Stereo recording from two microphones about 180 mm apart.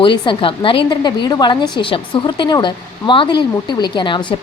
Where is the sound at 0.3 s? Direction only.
30° left (ahead or behind).